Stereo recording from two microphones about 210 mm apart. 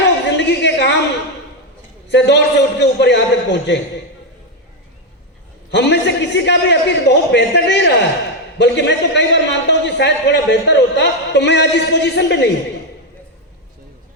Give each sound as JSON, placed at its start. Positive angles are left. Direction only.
{"t": 0.0, "sound": "a sound", "side_deg": 55}
{"t": 2.0, "sound": "a man's voice", "side_deg": 55}
{"t": 5.7, "sound": "a man's voice", "side_deg": 55}